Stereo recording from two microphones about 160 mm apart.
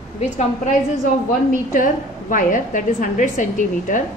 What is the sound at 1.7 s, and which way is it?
A woman's voice, 55° left (ahead or behind).